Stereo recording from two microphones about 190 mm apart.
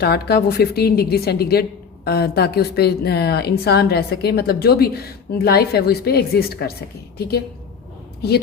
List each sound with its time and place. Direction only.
0.0 s a woman's voice: 55° left (ahead or behind)